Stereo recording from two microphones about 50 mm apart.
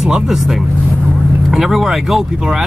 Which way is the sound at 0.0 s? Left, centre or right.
Centre.